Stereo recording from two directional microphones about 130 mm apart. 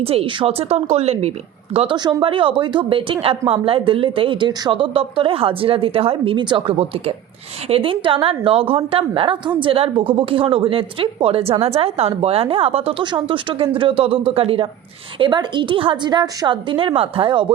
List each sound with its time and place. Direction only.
0.0 s a woman's voice: 50° right (ahead or behind)